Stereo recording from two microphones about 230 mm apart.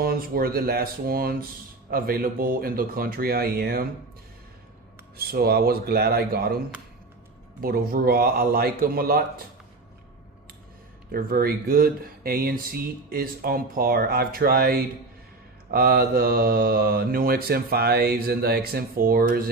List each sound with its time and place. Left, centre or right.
0.0 s speech: right
5.1 s speech: right
7.6 s speech: right
11.1 s speech: right